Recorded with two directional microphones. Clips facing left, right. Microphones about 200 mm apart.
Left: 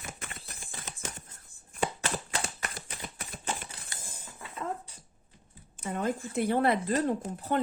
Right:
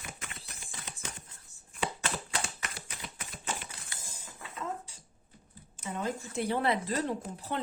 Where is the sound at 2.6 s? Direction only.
45° left (ahead or behind).